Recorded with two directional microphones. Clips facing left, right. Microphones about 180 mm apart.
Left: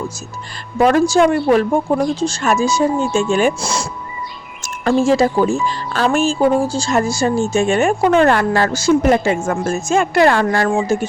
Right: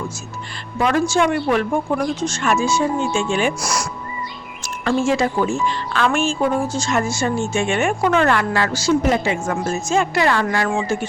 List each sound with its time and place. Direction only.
0.8 s speech: 40° left (ahead or behind)
3.6 s speech: 25° left (ahead or behind)
4.8 s speech: 40° left (ahead or behind)